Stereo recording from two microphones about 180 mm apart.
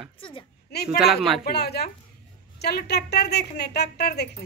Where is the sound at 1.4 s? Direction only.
65° left (ahead or behind).